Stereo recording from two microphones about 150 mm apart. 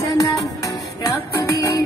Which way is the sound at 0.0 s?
20° left (ahead or behind).